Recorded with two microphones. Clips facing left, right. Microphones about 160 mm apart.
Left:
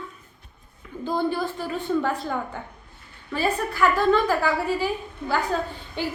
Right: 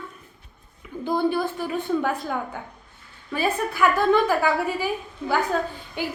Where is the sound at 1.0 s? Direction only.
15° right (ahead or behind).